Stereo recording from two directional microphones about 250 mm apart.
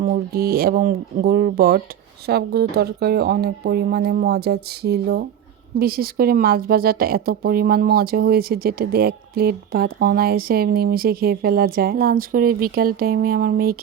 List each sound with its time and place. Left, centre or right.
0.0 s speech: right